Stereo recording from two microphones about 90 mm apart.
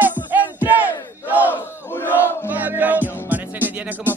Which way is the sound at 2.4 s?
20° right (ahead or behind).